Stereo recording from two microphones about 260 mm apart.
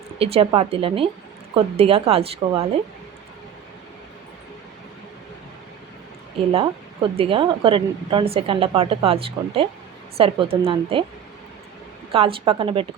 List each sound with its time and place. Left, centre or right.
0.2 s speech: right
7.2 s speech: centre
12.1 s speech: right